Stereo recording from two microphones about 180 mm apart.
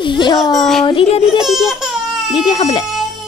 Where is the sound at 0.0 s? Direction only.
25° left (ahead or behind).